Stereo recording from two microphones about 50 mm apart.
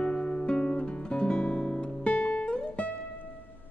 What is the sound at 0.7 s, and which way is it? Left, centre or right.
Guitar, left.